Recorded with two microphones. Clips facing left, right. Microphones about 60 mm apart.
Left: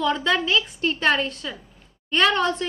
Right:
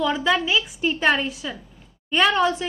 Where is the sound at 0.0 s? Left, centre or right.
Centre.